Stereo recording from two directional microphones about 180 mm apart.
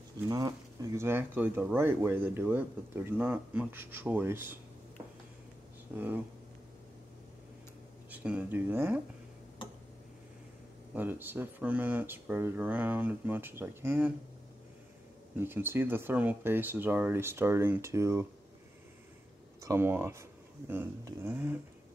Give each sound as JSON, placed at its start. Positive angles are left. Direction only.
{"t": 0.3, "sound": "speech", "side_deg": -20}
{"t": 5.9, "sound": "speech", "side_deg": -10}
{"t": 8.1, "sound": "speech", "side_deg": -10}
{"t": 11.0, "sound": "speech", "side_deg": -10}
{"t": 15.3, "sound": "speech", "side_deg": -10}
{"t": 19.6, "sound": "speech", "side_deg": -15}